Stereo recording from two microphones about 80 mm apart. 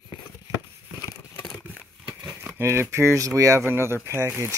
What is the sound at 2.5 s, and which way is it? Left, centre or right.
Speech, right.